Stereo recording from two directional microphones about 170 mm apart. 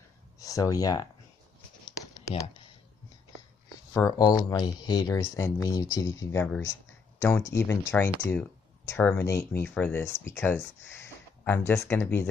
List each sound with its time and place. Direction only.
0.4 s speech: 20° left (ahead or behind)
2.0 s a sound: 20° left (ahead or behind)
4.2 s speech: 25° left (ahead or behind)